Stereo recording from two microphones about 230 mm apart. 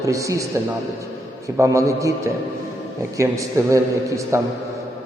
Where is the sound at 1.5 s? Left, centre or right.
Centre.